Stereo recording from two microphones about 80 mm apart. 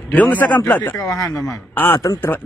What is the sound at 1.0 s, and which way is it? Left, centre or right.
Speech, left.